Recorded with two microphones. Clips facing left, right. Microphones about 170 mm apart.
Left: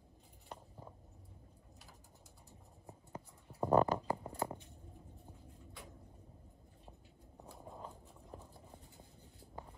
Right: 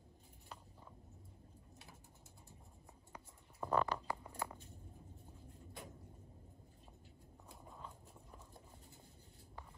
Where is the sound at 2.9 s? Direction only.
35° left (ahead or behind).